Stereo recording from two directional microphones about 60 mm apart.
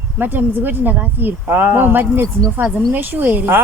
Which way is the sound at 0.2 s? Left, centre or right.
Right.